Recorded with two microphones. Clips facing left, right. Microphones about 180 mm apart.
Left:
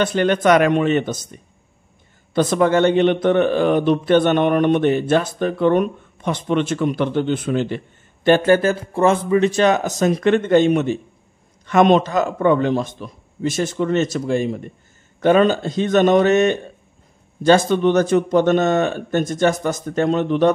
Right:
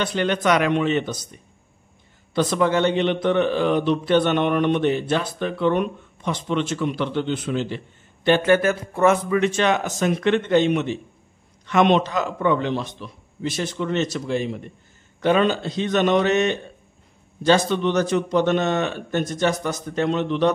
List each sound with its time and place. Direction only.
0.0 s a man's voice: 50° left (ahead or behind)
2.3 s a man's voice: 50° left (ahead or behind)
8.5 s a man's voice: 30° left (ahead or behind); by 20.5 s 50° left (ahead or behind)